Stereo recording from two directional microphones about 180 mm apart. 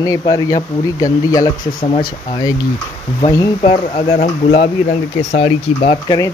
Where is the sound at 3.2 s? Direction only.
20° left (ahead or behind).